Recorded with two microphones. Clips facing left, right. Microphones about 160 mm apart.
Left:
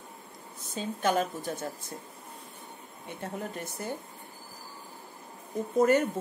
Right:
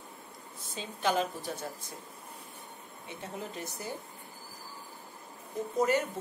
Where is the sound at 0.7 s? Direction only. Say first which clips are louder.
Left 3 dB; 50° left (ahead or behind).